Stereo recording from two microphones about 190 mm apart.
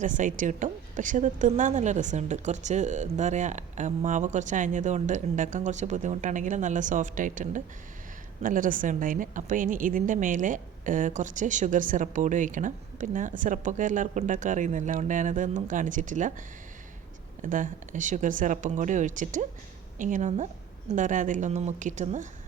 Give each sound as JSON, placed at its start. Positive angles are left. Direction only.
{"t": 0.0, "sound": "a woman's voice", "side_deg": -40}
{"t": 17.4, "sound": "a woman's voice", "side_deg": -45}